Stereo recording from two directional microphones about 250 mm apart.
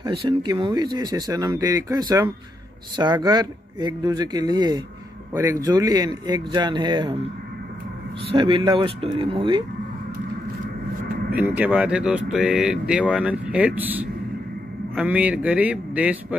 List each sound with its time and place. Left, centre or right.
0.0 s speech: centre
8.3 s speech: centre
11.3 s speech: centre